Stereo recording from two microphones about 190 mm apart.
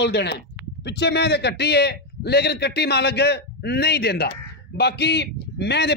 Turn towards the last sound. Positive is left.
turn(degrees=60)  # may be behind; listen again after turning